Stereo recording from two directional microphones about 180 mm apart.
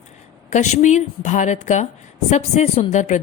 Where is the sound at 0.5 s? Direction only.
40° left (ahead or behind).